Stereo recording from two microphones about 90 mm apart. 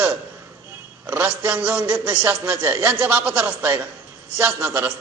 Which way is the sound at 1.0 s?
20° right (ahead or behind).